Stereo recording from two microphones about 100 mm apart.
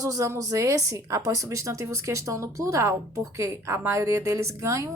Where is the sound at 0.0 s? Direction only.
35° right (ahead or behind).